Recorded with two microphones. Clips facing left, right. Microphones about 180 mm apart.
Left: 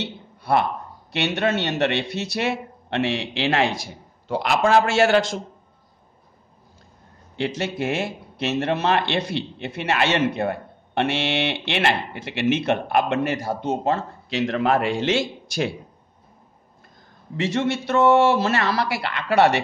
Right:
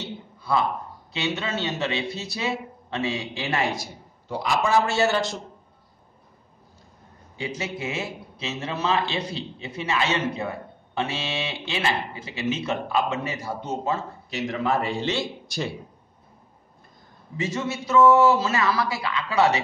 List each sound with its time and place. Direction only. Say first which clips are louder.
0.0 s a sound: left 4 dB; 70° left (ahead or behind)
1.1 s speech: left 6 dB; 70° left (ahead or behind); by 5.4 s 90° left
7.3 s a man's voice: left 6 dB; 75° left (ahead or behind)
17.4 s speech: left 5 dB; 90° left; by 19.5 s 70° left (ahead or behind)